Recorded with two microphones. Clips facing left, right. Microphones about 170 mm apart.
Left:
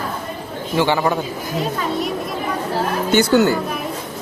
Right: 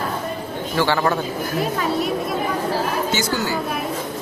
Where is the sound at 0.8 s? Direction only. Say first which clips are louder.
Left 2 dB; 15° left (ahead or behind).